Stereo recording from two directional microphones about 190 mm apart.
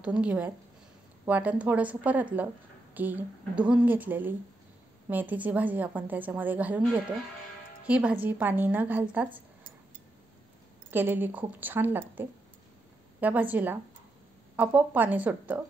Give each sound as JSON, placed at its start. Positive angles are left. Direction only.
{"t": 0.0, "sound": "a woman's voice", "side_deg": -5}
{"t": 10.9, "sound": "a woman's voice", "side_deg": -10}